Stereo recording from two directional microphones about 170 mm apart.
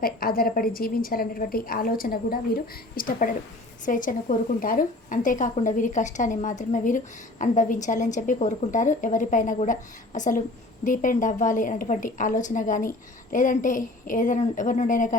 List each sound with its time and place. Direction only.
0.0 s a woman's voice: 60° left (ahead or behind)